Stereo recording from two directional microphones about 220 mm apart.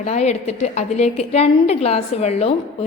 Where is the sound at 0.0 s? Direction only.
30° left (ahead or behind).